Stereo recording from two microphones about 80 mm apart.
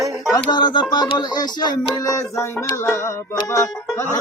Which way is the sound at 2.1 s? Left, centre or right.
Left.